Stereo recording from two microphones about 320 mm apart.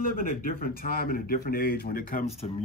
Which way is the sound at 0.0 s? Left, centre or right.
Left.